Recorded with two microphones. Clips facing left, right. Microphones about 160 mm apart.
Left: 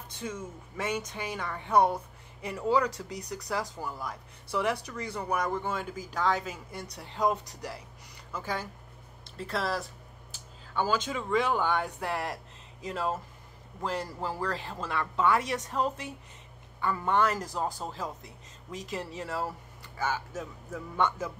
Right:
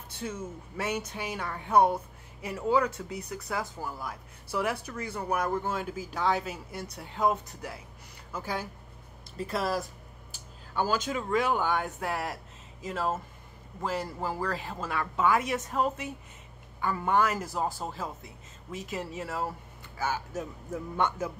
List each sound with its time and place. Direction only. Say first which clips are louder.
0.2 s speech: right 1 dB; 10° right (ahead or behind)